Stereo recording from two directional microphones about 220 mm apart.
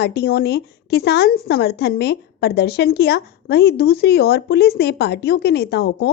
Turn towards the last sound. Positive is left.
turn(degrees=45)  # may be behind; listen again after turning